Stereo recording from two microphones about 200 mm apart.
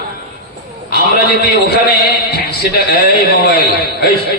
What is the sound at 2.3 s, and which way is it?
Speech, 55° left (ahead or behind).